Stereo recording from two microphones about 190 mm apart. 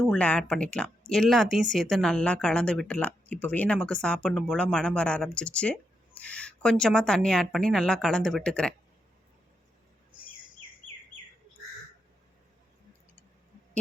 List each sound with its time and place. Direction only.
0.0 s speech: 5° left (ahead or behind)